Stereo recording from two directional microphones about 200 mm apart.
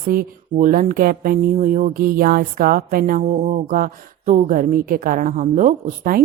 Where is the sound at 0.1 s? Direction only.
40° right (ahead or behind).